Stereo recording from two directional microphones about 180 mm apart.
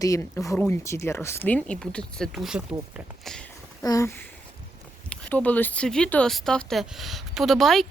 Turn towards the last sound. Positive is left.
turn(degrees=0)  # may be behind; listen again after turning